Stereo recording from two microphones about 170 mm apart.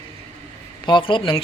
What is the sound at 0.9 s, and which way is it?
Speech, 30° left (ahead or behind).